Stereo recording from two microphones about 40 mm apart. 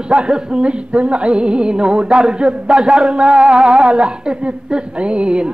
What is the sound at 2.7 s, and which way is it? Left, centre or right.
Speech, centre.